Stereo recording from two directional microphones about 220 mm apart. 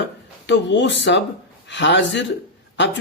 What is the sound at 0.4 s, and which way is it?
Speech, 55° left (ahead or behind).